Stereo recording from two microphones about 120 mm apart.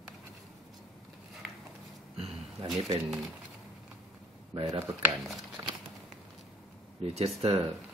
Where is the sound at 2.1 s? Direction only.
60° right (ahead or behind).